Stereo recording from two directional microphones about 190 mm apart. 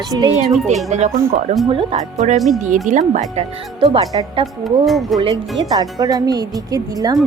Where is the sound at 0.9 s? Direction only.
35° right (ahead or behind).